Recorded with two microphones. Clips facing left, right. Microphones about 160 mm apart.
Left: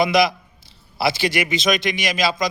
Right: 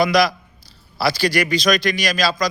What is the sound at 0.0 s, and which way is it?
A man's voice, 20° left (ahead or behind).